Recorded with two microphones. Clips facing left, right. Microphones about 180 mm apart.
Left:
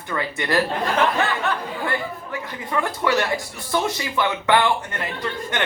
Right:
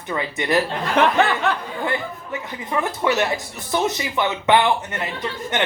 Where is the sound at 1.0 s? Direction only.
70° right (ahead or behind).